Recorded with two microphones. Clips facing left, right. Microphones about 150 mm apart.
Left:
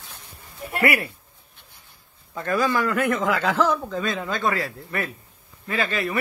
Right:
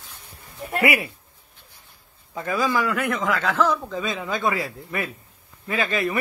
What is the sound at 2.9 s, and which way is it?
A man's voice, 10° left (ahead or behind).